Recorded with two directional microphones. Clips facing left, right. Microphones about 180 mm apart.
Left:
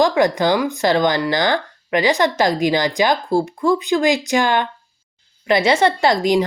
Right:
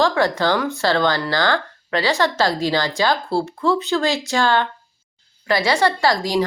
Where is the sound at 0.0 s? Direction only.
15° left (ahead or behind).